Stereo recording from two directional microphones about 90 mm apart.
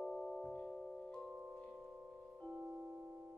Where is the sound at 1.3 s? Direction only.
5° right (ahead or behind).